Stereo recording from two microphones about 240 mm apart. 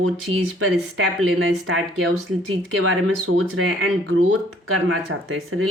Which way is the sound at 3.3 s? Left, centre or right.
Right.